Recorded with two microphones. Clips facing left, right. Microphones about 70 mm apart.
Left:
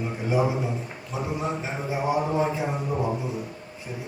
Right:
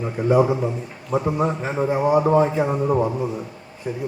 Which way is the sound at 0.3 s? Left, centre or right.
Right.